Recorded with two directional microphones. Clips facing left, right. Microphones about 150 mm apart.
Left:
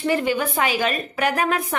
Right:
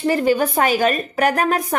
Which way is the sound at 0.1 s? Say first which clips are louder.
Right 5 dB; 40° right (ahead or behind).